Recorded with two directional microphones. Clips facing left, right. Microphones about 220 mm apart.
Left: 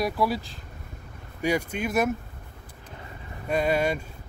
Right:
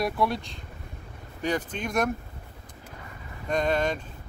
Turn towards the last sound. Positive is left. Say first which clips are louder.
# left 1 dB
turn(degrees=10)  # may be behind; listen again after turning